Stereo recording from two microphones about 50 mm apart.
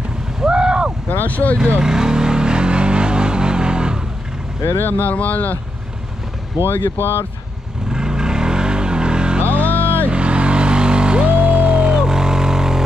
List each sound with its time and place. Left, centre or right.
0.4 s vehicle: centre
1.1 s speech: left
1.8 s vehicle: centre
4.6 s speech: left
4.9 s speech: left
6.7 s speech: left
7.9 s vehicle: centre
9.4 s music: right
10.0 s vehicle: right